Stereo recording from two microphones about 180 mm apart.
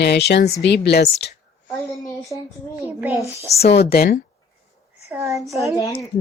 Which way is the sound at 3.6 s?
65° left (ahead or behind).